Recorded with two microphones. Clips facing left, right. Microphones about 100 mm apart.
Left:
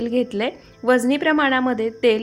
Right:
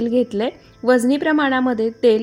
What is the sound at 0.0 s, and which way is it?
A woman's voice, 20° right (ahead or behind).